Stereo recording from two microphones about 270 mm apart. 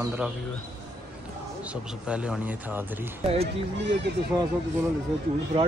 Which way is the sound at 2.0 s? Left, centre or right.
Centre.